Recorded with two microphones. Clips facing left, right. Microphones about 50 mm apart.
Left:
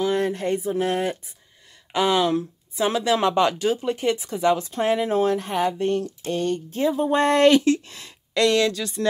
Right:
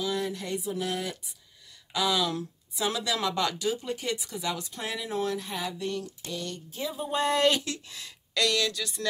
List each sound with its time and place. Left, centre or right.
0.0 s speech: left